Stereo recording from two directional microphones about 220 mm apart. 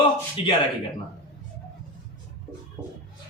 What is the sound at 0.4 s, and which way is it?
Speech, 25° left (ahead or behind).